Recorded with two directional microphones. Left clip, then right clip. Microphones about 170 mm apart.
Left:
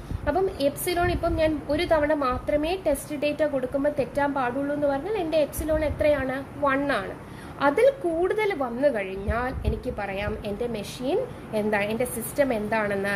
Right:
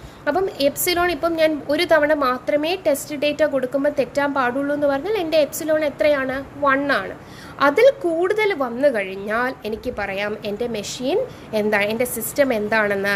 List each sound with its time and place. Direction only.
0.2 s a woman's voice: 25° right (ahead or behind)